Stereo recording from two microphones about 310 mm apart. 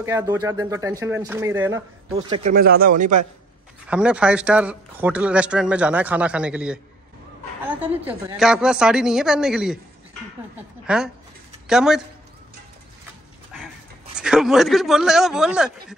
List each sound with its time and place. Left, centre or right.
0.0 s speech: centre
2.5 s speech: right
3.9 s speech: centre
10.9 s speech: centre
14.1 s speech: centre